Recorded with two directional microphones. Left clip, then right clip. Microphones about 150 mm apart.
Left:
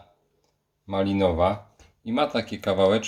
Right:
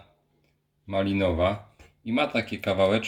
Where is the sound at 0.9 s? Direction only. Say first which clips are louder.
Left 2 dB; 40° left (ahead or behind).